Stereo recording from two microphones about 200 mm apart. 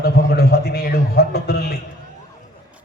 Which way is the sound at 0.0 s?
55° left (ahead or behind).